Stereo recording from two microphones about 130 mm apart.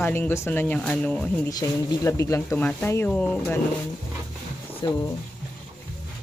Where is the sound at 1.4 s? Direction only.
25° left (ahead or behind).